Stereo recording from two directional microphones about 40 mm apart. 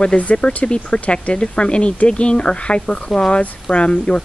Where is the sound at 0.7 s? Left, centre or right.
Left.